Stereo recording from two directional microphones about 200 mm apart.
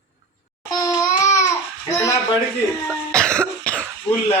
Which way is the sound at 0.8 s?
15° left (ahead or behind).